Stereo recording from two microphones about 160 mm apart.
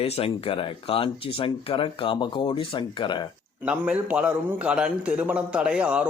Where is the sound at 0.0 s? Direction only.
35° left (ahead or behind).